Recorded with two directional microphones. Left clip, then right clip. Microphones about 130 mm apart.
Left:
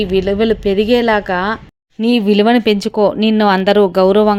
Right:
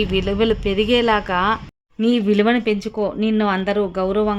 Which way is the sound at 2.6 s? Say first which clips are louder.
Left 8 dB; 55° left (ahead or behind).